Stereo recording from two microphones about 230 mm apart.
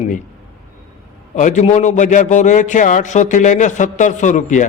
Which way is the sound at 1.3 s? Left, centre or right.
Left.